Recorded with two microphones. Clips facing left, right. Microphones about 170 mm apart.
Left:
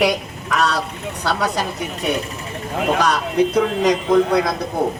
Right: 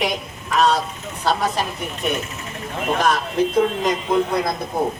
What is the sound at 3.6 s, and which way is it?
Speech, 75° left (ahead or behind).